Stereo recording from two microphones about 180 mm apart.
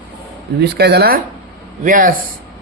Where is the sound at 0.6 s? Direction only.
65° right (ahead or behind).